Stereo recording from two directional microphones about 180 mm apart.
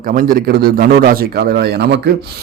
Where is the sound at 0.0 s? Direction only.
50° right (ahead or behind); by 2.1 s 65° right (ahead or behind).